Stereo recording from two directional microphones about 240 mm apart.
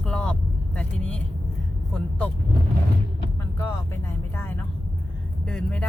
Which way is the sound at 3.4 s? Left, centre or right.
Centre.